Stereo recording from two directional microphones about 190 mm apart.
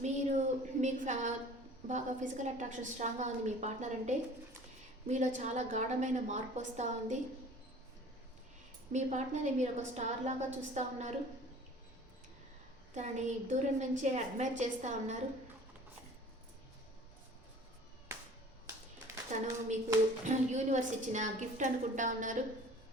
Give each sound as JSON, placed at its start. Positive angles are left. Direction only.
{"t": 0.0, "sound": "a sound", "side_deg": -40}
{"t": 1.9, "sound": "a woman's voice", "side_deg": -40}
{"t": 8.9, "sound": "a woman's voice", "side_deg": -40}
{"t": 12.9, "sound": "a woman's voice", "side_deg": -40}
{"t": 19.3, "sound": "a woman's voice", "side_deg": -40}